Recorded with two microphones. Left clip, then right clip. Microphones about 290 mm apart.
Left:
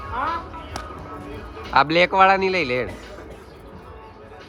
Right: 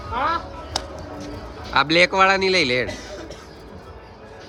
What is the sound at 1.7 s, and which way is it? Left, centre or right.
Speech, centre.